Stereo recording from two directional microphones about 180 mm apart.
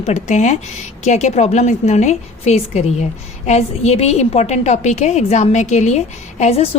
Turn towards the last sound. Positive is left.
turn(degrees=35)  # may be behind; listen again after turning